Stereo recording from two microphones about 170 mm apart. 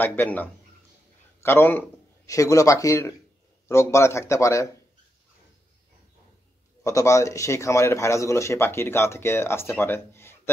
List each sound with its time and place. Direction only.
0.0 s a man's voice: 10° left (ahead or behind)
6.8 s a man's voice: 20° left (ahead or behind)